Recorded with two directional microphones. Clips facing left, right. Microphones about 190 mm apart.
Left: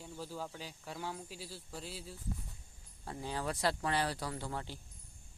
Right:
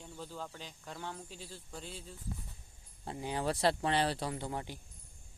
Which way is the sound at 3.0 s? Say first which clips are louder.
Right 3 dB; 20° right (ahead or behind).